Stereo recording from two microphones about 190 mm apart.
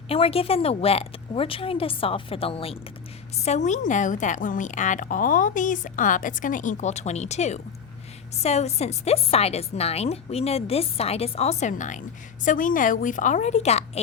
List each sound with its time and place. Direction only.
0.1 s a woman's voice: 30° left (ahead or behind)